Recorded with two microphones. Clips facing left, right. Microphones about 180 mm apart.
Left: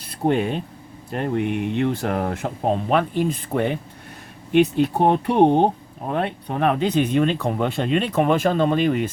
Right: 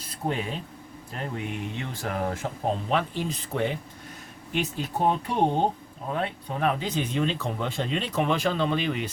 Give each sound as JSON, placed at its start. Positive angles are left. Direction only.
{"t": 0.0, "sound": "speech", "side_deg": 65}